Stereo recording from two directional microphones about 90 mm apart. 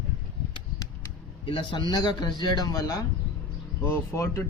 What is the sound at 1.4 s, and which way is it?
Speech, 70° left (ahead or behind).